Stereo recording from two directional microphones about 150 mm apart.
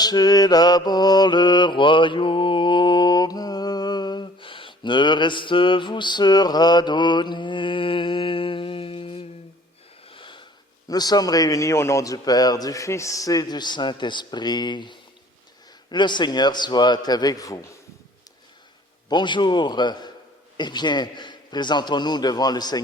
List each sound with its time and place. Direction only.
0.0 s mantra: 25° left (ahead or behind)
10.1 s sniff: 35° left (ahead or behind)
10.8 s speech: 25° left (ahead or behind)
19.0 s speech: 30° left (ahead or behind)